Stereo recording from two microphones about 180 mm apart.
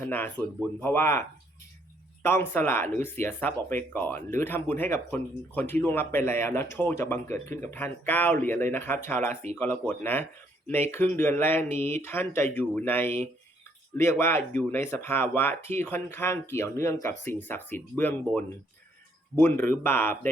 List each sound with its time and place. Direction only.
0.0 s speech: 10° left (ahead or behind)
2.2 s speech: 10° left (ahead or behind)
9.3 s speech: 40° right (ahead or behind)
9.6 s speech: 10° left (ahead or behind)